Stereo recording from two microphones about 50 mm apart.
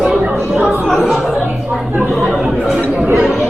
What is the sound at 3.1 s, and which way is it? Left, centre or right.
Speech, right.